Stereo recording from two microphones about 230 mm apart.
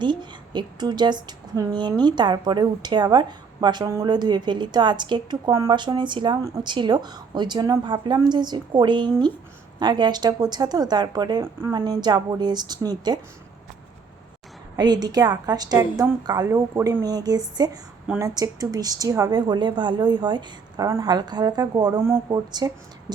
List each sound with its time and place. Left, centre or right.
0.0 s a woman's voice: centre
14.8 s speech: centre